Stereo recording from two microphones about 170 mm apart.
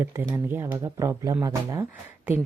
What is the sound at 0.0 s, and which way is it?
Speech, 10° right (ahead or behind).